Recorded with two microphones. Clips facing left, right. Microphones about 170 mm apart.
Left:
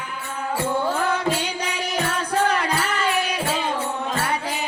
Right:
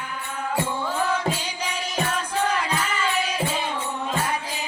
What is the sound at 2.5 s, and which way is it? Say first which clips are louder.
Music: left 3 dB; 65° left (ahead or behind).